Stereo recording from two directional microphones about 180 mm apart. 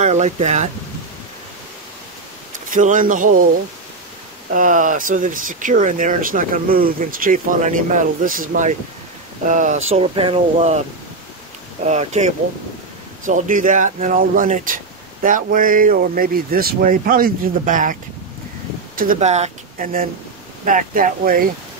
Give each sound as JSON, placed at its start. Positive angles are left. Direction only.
{"t": 0.0, "sound": "speech", "side_deg": -40}
{"t": 2.7, "sound": "speech", "side_deg": -45}
{"t": 4.5, "sound": "speech", "side_deg": -45}
{"t": 11.8, "sound": "speech", "side_deg": -40}
{"t": 19.1, "sound": "speech", "side_deg": -40}